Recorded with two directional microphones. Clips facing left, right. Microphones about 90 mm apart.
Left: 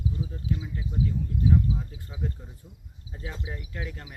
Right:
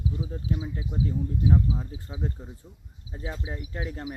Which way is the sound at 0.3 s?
30° right (ahead or behind).